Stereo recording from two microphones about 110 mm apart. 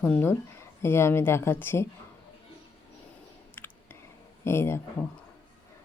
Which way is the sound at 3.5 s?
20° left (ahead or behind).